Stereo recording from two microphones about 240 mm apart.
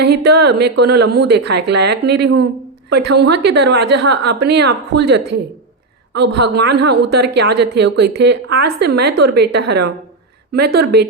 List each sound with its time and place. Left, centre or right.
0.0 s speech: right